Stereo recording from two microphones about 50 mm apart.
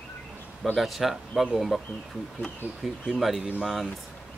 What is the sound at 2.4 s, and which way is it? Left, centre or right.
Speech, left.